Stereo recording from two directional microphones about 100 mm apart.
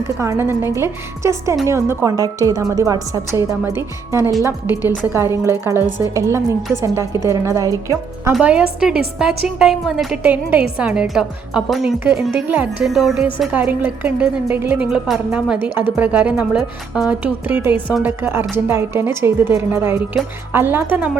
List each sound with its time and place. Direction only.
0.2 s a woman's voice: 25° right (ahead or behind)
2.1 s a woman's voice: 40° right (ahead or behind)
3.6 s a woman's voice: 20° right (ahead or behind)
8.4 s speech: 10° right (ahead or behind)
10.2 s speech: 15° right (ahead or behind)
12.8 s speech: centre (ahead or behind)
13.5 s speech: 20° right (ahead or behind)
14.8 s a woman's voice: 5° right (ahead or behind)